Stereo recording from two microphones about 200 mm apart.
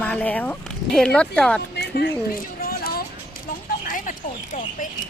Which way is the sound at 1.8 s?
55° left (ahead or behind).